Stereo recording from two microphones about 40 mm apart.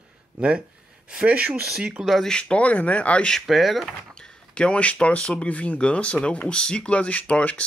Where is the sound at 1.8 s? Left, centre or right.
Right.